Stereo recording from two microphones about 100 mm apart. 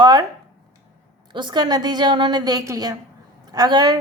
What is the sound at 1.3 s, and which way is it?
A woman's voice, 50° right (ahead or behind).